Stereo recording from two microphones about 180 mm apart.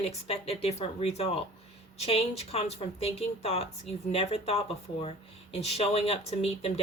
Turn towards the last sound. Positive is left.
turn(degrees=35)  # may be behind; listen again after turning